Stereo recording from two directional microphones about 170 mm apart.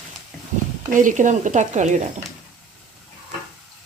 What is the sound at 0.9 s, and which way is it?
Speech, 50° right (ahead or behind).